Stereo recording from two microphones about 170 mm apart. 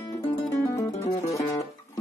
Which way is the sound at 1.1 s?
20° left (ahead or behind).